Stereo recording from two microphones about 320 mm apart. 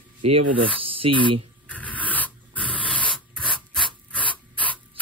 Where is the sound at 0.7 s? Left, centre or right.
Centre.